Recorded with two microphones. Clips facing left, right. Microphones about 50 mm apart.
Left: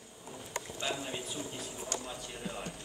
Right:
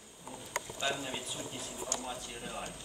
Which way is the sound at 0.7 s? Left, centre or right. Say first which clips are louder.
Right 1 dB; centre.